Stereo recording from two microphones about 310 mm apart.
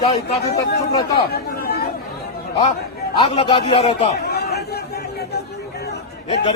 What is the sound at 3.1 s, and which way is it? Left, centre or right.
A man's voice, centre.